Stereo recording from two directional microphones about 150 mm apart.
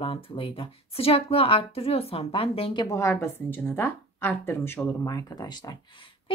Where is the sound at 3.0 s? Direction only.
15° left (ahead or behind).